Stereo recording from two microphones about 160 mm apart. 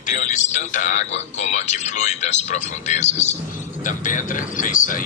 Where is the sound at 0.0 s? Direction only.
50° left (ahead or behind).